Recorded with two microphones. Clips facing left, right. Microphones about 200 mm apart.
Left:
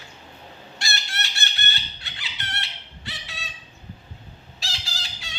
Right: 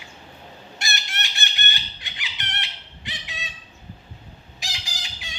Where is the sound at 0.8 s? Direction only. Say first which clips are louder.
Even; 20° right (ahead or behind).